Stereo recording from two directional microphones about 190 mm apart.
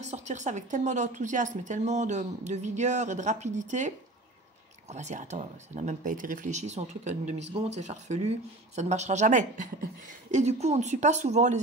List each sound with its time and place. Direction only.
0.0 s a woman's voice: 35° right (ahead or behind)